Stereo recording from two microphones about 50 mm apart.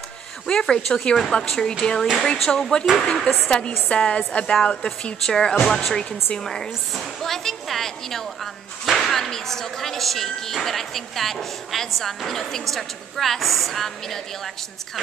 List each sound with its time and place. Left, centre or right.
0.5 s a woman's voice: centre
5.2 s a woman's voice: centre